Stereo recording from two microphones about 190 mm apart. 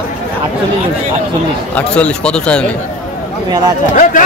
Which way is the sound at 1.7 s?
5° left (ahead or behind).